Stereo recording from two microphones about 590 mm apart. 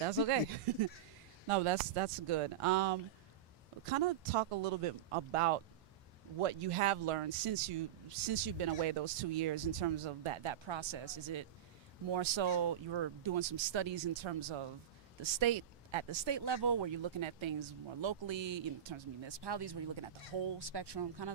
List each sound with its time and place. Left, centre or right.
0.0 s speech: right
1.5 s speech: right